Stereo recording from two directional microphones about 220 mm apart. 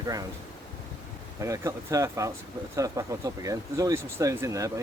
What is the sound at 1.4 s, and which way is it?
Speech, 15° right (ahead or behind).